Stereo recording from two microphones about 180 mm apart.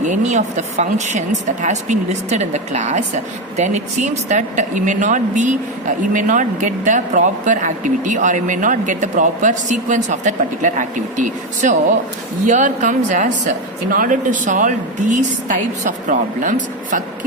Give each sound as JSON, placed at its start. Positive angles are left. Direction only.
{"t": 0.0, "sound": "a woman's voice", "side_deg": -40}